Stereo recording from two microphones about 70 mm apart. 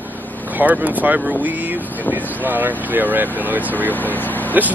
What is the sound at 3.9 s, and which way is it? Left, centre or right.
Speech, left.